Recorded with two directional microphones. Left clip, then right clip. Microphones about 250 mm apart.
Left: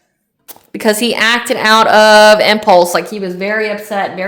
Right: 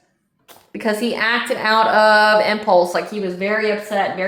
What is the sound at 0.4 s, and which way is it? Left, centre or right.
Speech, left.